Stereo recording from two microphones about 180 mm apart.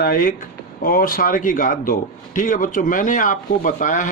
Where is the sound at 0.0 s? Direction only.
55° left (ahead or behind).